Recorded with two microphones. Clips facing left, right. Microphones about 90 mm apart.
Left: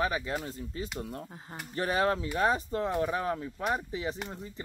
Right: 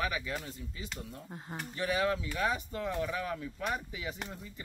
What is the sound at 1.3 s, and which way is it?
Speech, centre (ahead or behind).